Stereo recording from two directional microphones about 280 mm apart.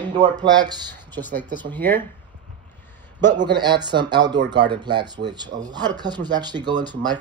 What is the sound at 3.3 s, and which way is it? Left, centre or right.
Speech, centre.